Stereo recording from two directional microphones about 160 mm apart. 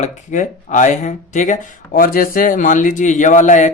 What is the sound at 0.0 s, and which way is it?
Speech, 50° left (ahead or behind).